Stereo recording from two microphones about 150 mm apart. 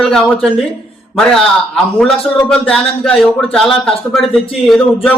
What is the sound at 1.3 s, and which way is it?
A man's voice, 5° left (ahead or behind).